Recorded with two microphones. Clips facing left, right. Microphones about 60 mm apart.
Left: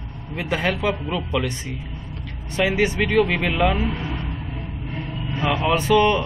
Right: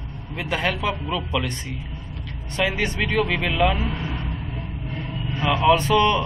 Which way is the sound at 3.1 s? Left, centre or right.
Left.